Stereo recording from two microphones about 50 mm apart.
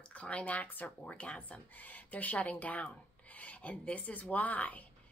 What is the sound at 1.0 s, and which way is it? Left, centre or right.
A woman's voice, left.